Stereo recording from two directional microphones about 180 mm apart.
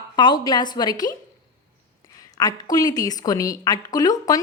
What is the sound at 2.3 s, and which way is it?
A woman's voice, 20° left (ahead or behind).